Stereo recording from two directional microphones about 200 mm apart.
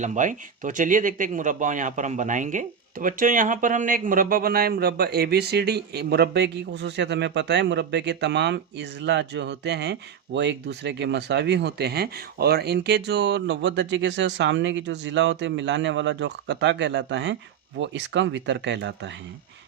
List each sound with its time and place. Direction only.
0.0 s speech: 40° right (ahead or behind); by 19.1 s 60° right (ahead or behind)